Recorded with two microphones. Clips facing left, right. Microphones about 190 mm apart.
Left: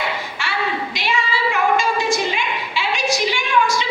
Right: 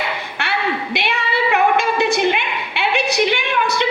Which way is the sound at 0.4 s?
60° right (ahead or behind).